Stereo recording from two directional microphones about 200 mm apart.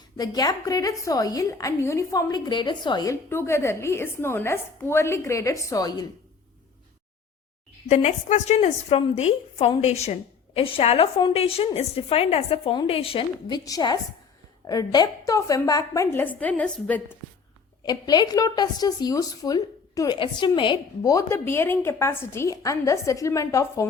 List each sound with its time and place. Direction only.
0.2 s a woman's voice: 20° left (ahead or behind)
7.9 s a woman's voice: 35° left (ahead or behind); by 17.0 s 5° left (ahead or behind)
17.8 s a woman's voice: 20° left (ahead or behind)